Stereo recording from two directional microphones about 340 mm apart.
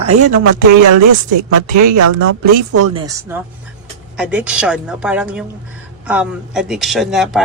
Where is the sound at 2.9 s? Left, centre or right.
Centre.